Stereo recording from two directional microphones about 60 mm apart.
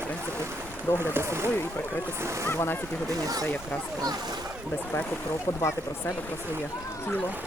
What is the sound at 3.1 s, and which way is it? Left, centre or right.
Speech, right.